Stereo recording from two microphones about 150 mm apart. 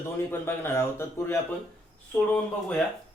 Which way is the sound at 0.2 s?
15° left (ahead or behind).